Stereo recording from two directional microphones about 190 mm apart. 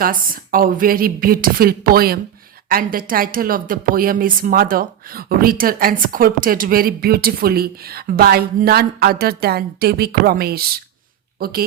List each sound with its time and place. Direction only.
0.0 s a woman's voice: 50° right (ahead or behind)